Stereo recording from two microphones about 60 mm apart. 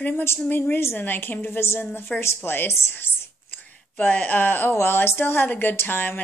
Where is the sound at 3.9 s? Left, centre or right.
Left.